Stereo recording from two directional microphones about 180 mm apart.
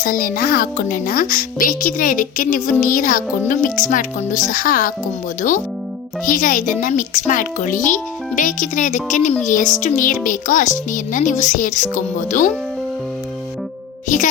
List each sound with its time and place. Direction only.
0.0 s speech: 50° left (ahead or behind)